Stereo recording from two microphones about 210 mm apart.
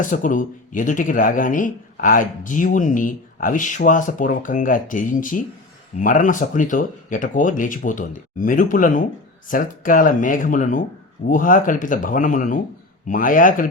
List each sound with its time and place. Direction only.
0.0 s speech: 40° left (ahead or behind)